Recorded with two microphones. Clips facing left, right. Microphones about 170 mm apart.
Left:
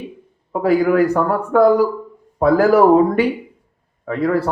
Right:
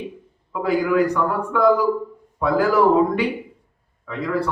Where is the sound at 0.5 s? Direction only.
50° left (ahead or behind).